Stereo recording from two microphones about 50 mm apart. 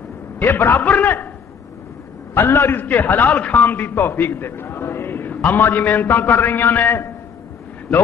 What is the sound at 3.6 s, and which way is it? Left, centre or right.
A man's voice, left.